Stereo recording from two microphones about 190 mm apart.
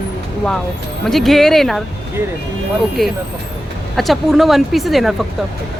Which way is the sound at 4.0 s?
Centre (ahead or behind).